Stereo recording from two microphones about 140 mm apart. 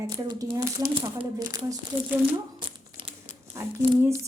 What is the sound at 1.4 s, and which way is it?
Speech, 25° right (ahead or behind).